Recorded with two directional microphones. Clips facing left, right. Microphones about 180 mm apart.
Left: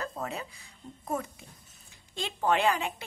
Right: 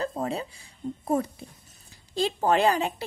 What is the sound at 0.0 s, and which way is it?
A woman's voice, 30° right (ahead or behind).